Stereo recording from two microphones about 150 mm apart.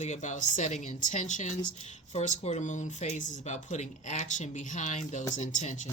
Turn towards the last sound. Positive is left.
turn(degrees=55)  # may be behind; listen again after turning